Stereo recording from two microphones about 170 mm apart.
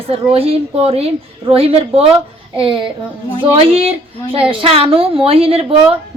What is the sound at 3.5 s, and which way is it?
Speech, 35° right (ahead or behind).